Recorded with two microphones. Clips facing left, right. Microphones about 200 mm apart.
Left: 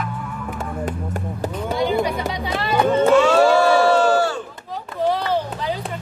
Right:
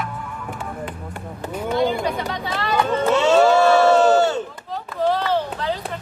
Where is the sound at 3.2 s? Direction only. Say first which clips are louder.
Even; 25° right (ahead or behind).